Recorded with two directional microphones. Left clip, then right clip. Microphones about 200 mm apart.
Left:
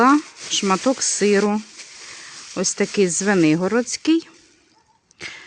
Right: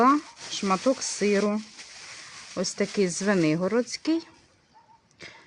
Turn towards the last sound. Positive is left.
turn(degrees=40)  # may be behind; listen again after turning